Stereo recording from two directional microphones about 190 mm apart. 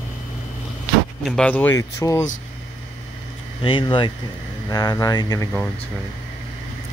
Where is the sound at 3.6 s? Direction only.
25° left (ahead or behind).